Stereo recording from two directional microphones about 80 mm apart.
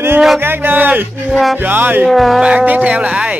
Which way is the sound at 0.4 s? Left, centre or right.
Right.